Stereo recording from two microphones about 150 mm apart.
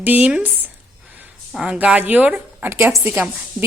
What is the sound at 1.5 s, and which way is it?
A woman's voice, 5° right (ahead or behind).